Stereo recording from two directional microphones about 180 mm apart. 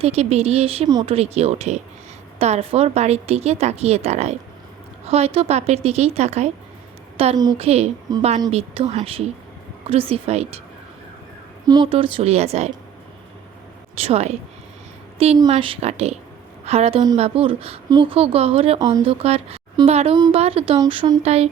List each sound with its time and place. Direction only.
0.0 s speech: 35° right (ahead or behind)
0.9 s a woman's voice: 20° right (ahead or behind)
1.1 s speech: 35° right (ahead or behind)
8.1 s a woman's voice: 20° right (ahead or behind)
8.4 s speech: 35° right (ahead or behind)
11.7 s speech: 25° right (ahead or behind)
14.0 s speech: 35° right (ahead or behind)
15.4 s speech: 30° right (ahead or behind)
20.1 s a woman's voice: 20° right (ahead or behind)